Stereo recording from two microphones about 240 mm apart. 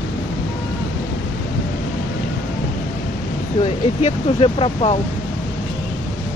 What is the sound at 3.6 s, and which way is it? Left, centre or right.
Speech, left.